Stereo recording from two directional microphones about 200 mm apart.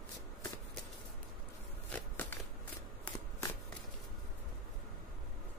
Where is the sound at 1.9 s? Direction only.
10° left (ahead or behind).